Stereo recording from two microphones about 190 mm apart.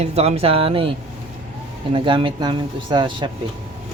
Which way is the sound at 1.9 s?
25° right (ahead or behind).